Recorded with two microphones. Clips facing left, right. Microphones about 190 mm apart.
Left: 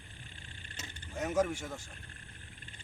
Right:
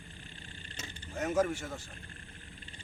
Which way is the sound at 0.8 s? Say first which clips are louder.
Right 1 dB; centre (ahead or behind).